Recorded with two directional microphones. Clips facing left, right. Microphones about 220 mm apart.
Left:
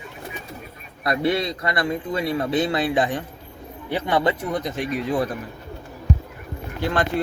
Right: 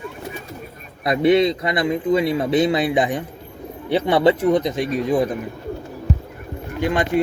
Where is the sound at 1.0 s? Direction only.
20° right (ahead or behind).